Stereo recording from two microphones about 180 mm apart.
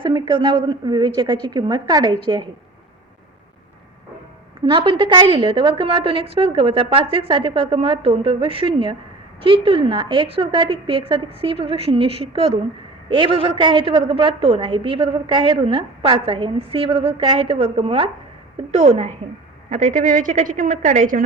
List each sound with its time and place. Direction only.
0.0 s a woman's voice: 25° right (ahead or behind)
4.6 s a woman's voice: 25° right (ahead or behind); by 21.2 s 50° right (ahead or behind)